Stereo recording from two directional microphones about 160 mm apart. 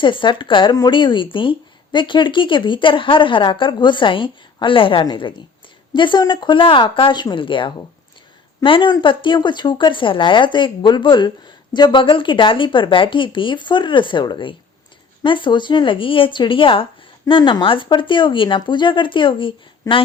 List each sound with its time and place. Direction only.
0.0 s speech: 30° left (ahead or behind)